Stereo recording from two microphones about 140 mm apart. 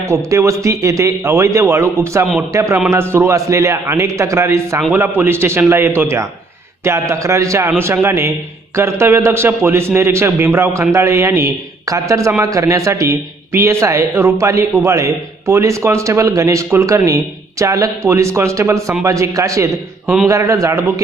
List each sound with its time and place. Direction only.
0.0 s a man's voice: 20° right (ahead or behind)